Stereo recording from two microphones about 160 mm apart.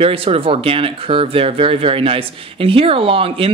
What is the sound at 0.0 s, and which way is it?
Speech, 35° right (ahead or behind).